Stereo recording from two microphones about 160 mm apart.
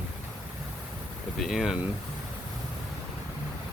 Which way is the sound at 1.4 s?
Centre (ahead or behind).